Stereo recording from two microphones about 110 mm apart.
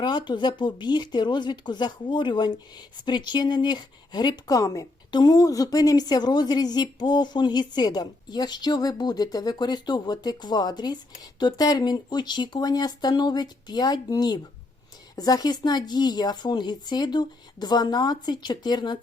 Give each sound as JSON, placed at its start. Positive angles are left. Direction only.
{"t": 0.0, "sound": "a woman's voice", "side_deg": 45}